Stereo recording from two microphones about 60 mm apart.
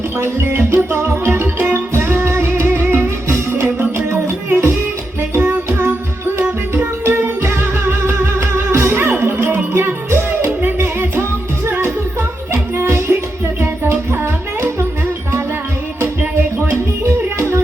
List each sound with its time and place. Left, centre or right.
0.2 s music: right
4.4 s music: right
7.0 s music: right
8.9 s music: right
12.7 s music: right
16.6 s music: right